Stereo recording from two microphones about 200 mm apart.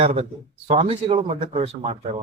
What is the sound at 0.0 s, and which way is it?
Speech, 30° right (ahead or behind).